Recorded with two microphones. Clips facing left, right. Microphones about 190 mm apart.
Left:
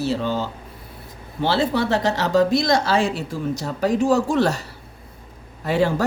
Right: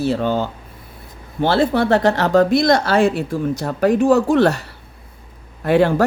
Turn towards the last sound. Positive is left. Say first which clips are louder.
# right 5 dB
turn(degrees=-60)  # may be behind; listen again after turning